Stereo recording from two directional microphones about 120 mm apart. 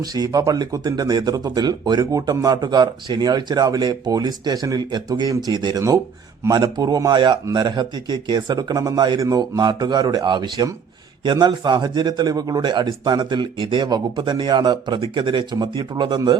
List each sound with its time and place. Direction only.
0.0 s a man's voice: 30° right (ahead or behind)